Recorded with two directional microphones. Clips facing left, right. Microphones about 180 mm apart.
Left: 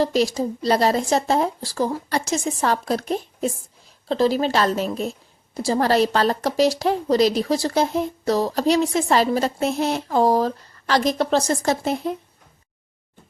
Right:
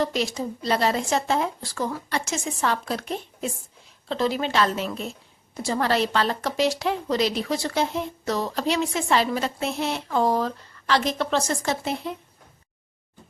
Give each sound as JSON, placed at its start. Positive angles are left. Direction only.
{"t": 0.0, "sound": "a woman's voice", "side_deg": 35}